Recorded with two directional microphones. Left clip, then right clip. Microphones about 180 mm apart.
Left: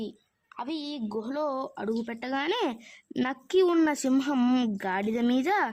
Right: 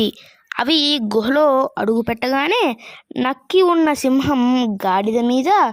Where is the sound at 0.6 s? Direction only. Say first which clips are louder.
Right 18 dB; 60° right (ahead or behind).